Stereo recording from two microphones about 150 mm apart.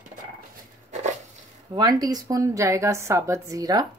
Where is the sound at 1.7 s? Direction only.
25° right (ahead or behind).